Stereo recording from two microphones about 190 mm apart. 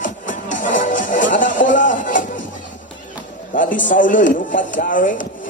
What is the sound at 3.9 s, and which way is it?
Speech, 45° left (ahead or behind).